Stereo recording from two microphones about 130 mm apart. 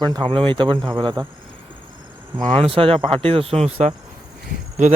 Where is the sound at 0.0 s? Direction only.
35° right (ahead or behind).